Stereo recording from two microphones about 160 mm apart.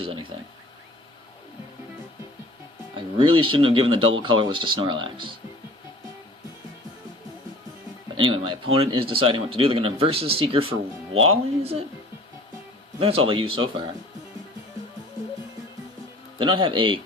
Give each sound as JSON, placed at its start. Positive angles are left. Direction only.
{"t": 0.0, "sound": "speech", "side_deg": -35}
{"t": 2.9, "sound": "speech", "side_deg": -35}
{"t": 8.1, "sound": "speech", "side_deg": -30}
{"t": 13.0, "sound": "speech", "side_deg": -35}
{"t": 16.4, "sound": "speech", "side_deg": -30}